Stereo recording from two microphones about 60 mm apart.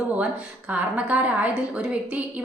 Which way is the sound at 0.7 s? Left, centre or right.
Right.